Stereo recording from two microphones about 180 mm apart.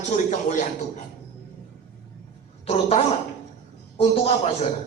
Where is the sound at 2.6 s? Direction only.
35° left (ahead or behind).